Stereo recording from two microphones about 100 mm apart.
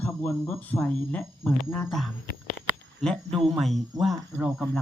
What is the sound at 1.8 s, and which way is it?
Speech, 5° left (ahead or behind).